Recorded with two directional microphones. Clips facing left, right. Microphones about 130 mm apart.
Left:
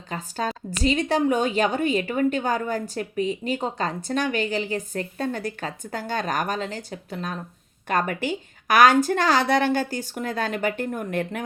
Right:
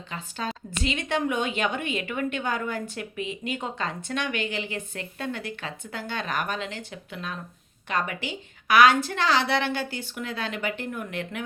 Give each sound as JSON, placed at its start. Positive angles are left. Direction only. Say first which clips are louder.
{"t": 0.1, "sound": "a woman's voice", "louder": "left 5 dB", "side_deg": 40}